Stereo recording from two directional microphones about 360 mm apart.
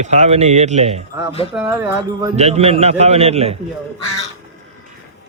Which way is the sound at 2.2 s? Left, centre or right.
Centre.